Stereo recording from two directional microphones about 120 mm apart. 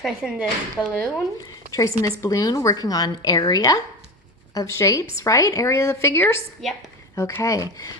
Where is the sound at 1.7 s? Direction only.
30° left (ahead or behind).